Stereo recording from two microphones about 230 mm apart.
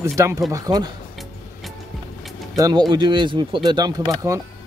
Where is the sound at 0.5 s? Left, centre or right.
Centre.